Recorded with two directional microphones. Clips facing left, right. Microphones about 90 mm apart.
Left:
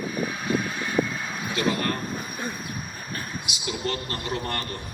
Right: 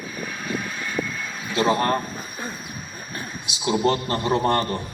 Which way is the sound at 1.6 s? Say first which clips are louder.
Right 6 dB; 30° right (ahead or behind).